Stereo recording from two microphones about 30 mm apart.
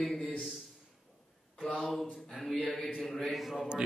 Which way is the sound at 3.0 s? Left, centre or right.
Centre.